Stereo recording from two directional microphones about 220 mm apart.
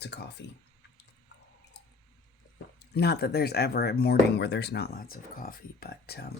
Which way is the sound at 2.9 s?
45° left (ahead or behind).